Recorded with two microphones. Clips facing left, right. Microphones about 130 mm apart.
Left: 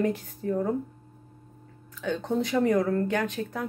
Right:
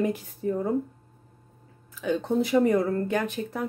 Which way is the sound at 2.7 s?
25° right (ahead or behind).